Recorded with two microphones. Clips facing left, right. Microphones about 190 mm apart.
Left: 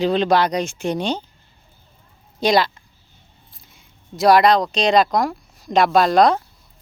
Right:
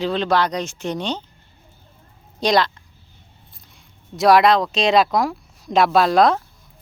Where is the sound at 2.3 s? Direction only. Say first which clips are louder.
Left 1 dB; 5° left (ahead or behind).